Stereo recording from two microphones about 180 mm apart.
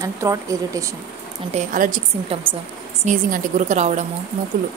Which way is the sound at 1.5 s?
45° right (ahead or behind).